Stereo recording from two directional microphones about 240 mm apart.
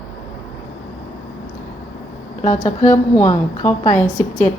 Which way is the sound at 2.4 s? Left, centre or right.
Left.